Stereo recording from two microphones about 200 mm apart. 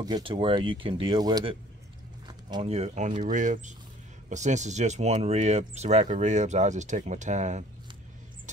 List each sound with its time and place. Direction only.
0.0 s speech: 25° right (ahead or behind)